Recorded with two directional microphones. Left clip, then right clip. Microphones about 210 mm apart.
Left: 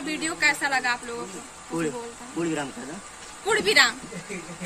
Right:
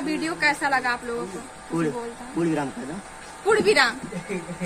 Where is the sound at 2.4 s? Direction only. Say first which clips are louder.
Right 3 dB; centre (ahead or behind).